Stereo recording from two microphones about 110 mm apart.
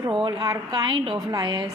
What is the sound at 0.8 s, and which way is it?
Speech, 50° right (ahead or behind).